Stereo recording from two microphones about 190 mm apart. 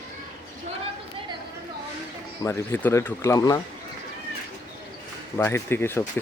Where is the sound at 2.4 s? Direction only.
10° left (ahead or behind).